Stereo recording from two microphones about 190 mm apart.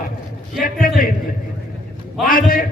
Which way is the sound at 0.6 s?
50° left (ahead or behind).